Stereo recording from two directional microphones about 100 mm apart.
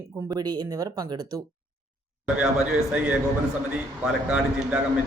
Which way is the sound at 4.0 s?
10° right (ahead or behind).